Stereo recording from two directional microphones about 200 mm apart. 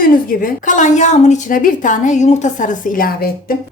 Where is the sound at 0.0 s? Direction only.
45° left (ahead or behind).